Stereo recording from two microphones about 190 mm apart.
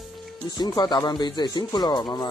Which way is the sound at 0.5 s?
20° left (ahead or behind).